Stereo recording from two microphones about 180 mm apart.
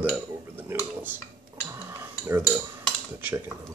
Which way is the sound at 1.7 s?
15° right (ahead or behind).